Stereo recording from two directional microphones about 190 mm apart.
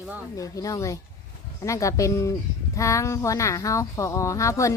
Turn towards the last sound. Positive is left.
turn(degrees=15)  # may be behind; listen again after turning